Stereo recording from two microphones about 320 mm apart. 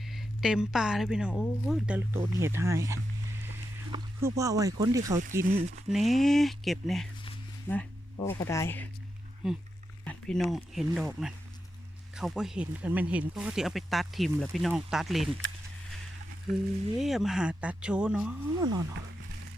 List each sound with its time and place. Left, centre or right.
0.0 s speech: centre
5.5 s speech: right
5.9 s speech: centre
17.0 s speech: centre